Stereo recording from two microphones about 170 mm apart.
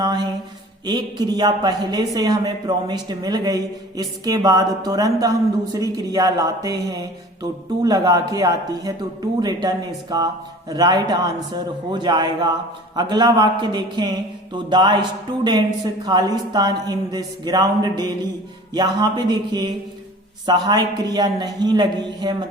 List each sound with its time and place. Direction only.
0.0 s a sound: 25° right (ahead or behind)
0.9 s a man's voice: 25° right (ahead or behind)
16.0 s a man's voice: 25° right (ahead or behind)